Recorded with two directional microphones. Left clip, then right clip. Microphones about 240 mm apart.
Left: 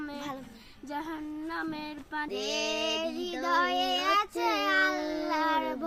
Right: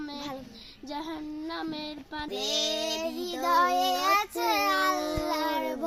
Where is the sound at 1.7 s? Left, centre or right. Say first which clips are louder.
Even; left.